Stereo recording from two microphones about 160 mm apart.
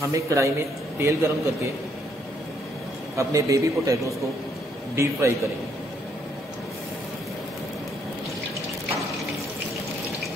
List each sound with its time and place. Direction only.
0.1 s a man's voice: 20° right (ahead or behind)
3.2 s a man's voice: 20° right (ahead or behind)